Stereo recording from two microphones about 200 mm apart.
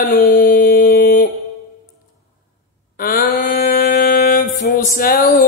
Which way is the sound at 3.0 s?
45° left (ahead or behind).